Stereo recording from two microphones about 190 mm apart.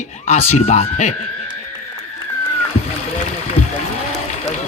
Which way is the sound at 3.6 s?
35° left (ahead or behind).